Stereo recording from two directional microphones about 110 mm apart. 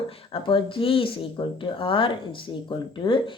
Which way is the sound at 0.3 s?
50° left (ahead or behind).